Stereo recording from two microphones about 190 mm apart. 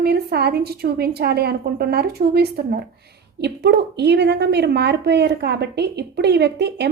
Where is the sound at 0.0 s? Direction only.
55° right (ahead or behind).